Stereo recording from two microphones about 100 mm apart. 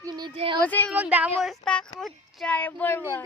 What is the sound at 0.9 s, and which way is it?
Speech, 15° right (ahead or behind).